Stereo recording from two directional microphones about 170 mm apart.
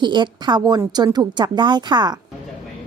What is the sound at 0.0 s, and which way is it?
A woman's voice, 25° right (ahead or behind).